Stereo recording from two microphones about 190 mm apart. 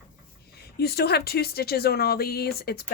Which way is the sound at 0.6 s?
55° left (ahead or behind).